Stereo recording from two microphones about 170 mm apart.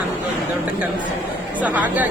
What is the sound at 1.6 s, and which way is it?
Speech, 10° right (ahead or behind).